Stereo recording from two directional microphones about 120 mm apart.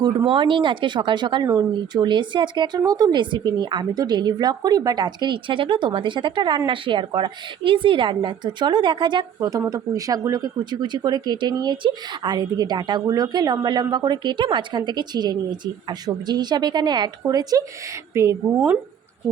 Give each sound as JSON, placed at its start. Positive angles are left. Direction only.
{"t": 0.3, "sound": "a woman's voice", "side_deg": -45}